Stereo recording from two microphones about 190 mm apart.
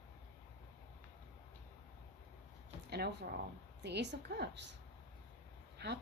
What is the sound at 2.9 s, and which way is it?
Speech, 60° right (ahead or behind).